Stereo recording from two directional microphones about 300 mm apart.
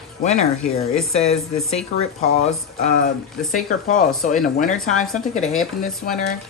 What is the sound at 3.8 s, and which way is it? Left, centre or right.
Speech, left.